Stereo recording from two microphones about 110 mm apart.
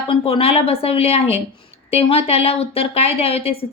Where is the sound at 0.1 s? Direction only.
60° left (ahead or behind).